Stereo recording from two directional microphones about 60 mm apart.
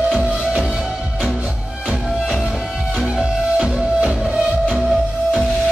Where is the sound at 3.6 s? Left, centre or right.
Centre.